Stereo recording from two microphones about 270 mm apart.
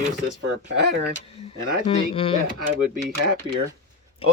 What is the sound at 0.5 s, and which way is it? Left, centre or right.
Speech, right.